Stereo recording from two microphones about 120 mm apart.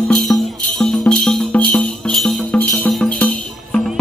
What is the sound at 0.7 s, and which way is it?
Music, 5° left (ahead or behind).